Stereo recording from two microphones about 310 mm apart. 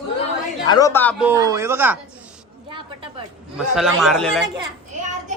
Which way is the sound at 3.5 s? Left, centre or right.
Centre.